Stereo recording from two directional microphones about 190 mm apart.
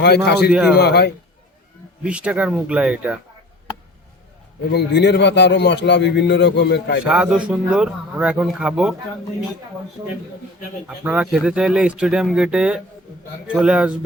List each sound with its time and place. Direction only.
0.3 s a man's voice: 60° left (ahead or behind)
0.5 s a man's voice: 5° right (ahead or behind)
0.8 s a man's voice: 60° left (ahead or behind)
2.0 s speech: 5° right (ahead or behind)
4.7 s a man's voice: 65° left (ahead or behind)
7.0 s a man's voice: 5° right (ahead or behind)
10.8 s a man's voice: 5° right (ahead or behind)